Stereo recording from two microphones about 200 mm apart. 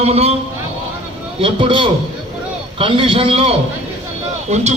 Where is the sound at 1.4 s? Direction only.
25° right (ahead or behind).